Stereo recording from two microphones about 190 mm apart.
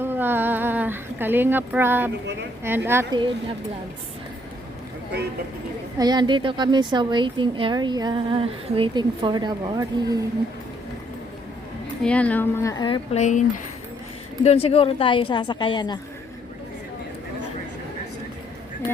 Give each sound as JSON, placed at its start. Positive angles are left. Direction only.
{"t": 0.0, "sound": "a sound", "side_deg": -10}
{"t": 2.6, "sound": "a woman's voice", "side_deg": -10}
{"t": 6.0, "sound": "a woman's voice", "side_deg": -20}
{"t": 12.0, "sound": "speech", "side_deg": 5}
{"t": 14.4, "sound": "a woman's voice", "side_deg": 30}